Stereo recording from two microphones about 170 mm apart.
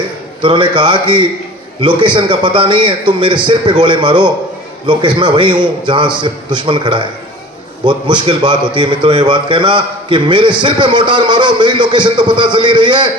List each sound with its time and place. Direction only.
0.4 s a man's voice: 30° right (ahead or behind)